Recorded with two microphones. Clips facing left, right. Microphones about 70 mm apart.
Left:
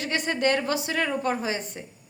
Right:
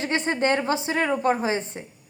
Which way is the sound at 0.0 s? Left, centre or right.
Right.